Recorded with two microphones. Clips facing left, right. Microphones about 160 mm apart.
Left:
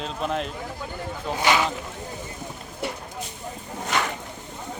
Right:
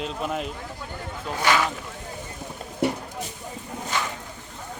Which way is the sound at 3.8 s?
75° left (ahead or behind).